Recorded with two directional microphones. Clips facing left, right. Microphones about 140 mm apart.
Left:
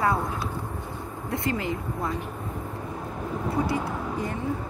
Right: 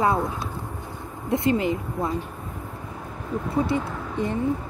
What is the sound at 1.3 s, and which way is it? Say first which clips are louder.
Speech: right 6 dB; 20° right (ahead or behind).